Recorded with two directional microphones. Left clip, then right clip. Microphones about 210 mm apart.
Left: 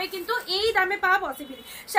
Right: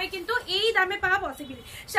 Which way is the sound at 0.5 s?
10° right (ahead or behind).